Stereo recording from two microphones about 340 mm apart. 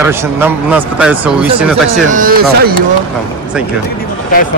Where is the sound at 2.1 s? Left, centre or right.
Right.